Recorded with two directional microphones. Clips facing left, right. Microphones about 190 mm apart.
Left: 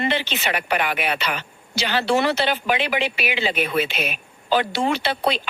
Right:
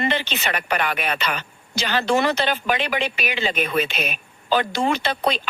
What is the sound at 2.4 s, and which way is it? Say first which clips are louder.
Speech: left 1 dB; 10° left (ahead or behind).